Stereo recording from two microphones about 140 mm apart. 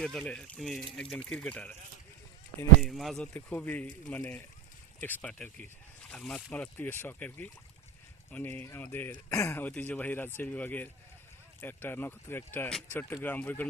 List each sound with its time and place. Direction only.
0.0 s speech: 5° left (ahead or behind)
2.8 s speech: centre (ahead or behind)
3.3 s speech: 10° left (ahead or behind)